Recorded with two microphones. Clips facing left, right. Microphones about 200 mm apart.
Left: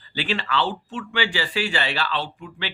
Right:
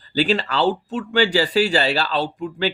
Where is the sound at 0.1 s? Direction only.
40° right (ahead or behind).